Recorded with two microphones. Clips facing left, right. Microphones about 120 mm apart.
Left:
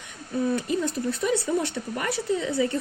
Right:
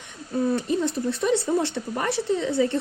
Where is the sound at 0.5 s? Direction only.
25° right (ahead or behind).